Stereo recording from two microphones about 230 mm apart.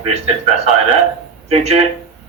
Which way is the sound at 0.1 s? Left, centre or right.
Right.